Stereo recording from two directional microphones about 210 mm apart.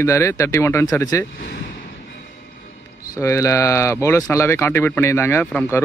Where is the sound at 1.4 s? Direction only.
55° left (ahead or behind).